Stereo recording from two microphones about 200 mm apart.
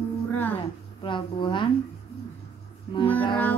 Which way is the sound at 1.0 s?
25° left (ahead or behind).